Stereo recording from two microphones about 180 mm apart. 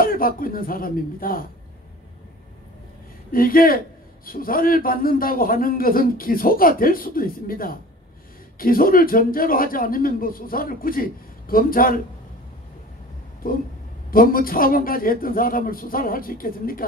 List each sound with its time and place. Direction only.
0.0 s a man's voice: 50° left (ahead or behind)
3.3 s a man's voice: 50° left (ahead or behind)
13.4 s a man's voice: 50° left (ahead or behind)